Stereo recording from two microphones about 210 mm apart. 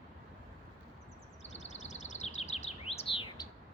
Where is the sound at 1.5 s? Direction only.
30° left (ahead or behind).